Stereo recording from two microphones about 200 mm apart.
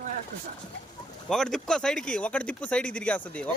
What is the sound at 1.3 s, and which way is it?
Speech, 5° left (ahead or behind).